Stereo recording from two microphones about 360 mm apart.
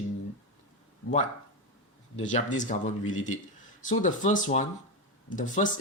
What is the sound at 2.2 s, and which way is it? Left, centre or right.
Speech, centre.